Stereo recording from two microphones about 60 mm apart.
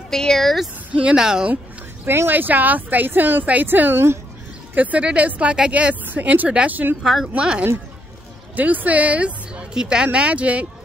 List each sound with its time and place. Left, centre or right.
0.1 s speech: centre
0.9 s speech: centre
2.0 s speech: right
4.7 s speech: right
7.0 s speech: centre
7.3 s speech: centre
8.5 s a woman's voice: right